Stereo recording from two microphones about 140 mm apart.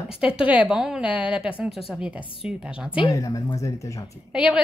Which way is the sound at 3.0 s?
25° left (ahead or behind).